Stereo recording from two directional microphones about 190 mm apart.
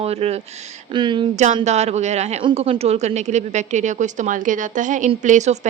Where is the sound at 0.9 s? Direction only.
25° right (ahead or behind).